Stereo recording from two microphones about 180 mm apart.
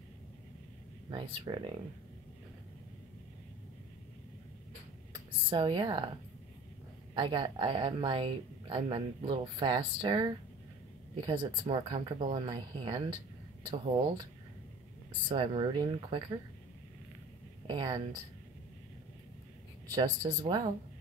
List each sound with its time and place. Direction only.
1.1 s speech: 25° right (ahead or behind)
5.1 s a sound: 25° right (ahead or behind)
7.2 s speech: 25° right (ahead or behind)
15.2 s speech: 30° right (ahead or behind)
17.6 s speech: 25° right (ahead or behind)
19.9 s speech: 20° right (ahead or behind)